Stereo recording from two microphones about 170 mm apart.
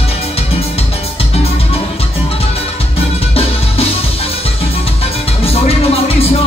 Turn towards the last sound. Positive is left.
turn(degrees=35)  # may be behind; listen again after turning